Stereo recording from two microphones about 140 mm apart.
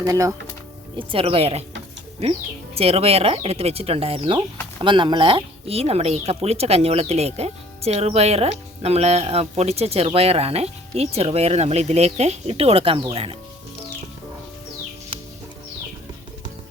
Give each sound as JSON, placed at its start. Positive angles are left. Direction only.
{"t": 0.0, "sound": "speech", "side_deg": -20}
{"t": 0.9, "sound": "speech", "side_deg": -40}
{"t": 2.7, "sound": "speech", "side_deg": -45}